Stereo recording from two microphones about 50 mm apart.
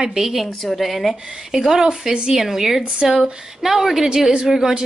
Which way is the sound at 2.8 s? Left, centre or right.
Centre.